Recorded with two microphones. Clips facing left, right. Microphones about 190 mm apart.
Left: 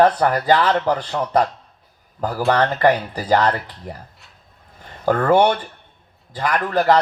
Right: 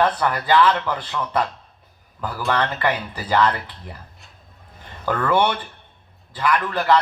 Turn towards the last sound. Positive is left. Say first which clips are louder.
# left 2 dB
turn(degrees=40)  # may be behind; listen again after turning